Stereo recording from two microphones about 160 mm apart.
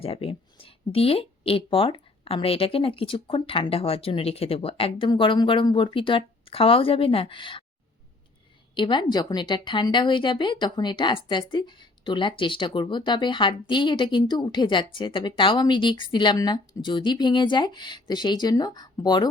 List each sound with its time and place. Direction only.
0.0 s a woman's voice: 35° left (ahead or behind)
8.7 s a woman's voice: 30° left (ahead or behind)